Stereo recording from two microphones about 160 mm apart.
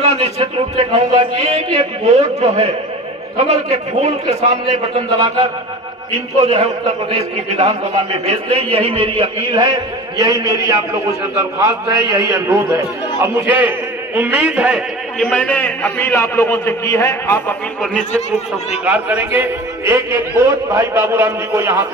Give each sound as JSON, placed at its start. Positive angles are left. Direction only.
{"t": 0.0, "sound": "a man's voice", "side_deg": -40}
{"t": 15.2, "sound": "a man's voice", "side_deg": 10}
{"t": 18.9, "sound": "a man's voice", "side_deg": -10}